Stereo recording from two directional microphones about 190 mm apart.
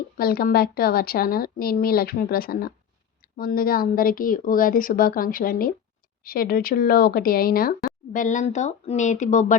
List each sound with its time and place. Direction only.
0.2 s speech: 50° left (ahead or behind)